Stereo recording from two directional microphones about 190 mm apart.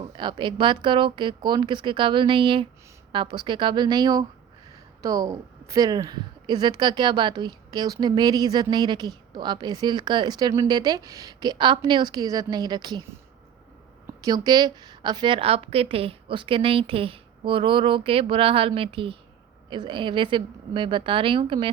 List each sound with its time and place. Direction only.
0.2 s a woman's voice: 25° right (ahead or behind)
14.1 s a woman's voice: 20° right (ahead or behind)